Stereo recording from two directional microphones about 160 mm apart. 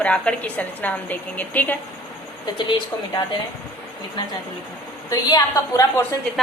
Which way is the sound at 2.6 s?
30° left (ahead or behind).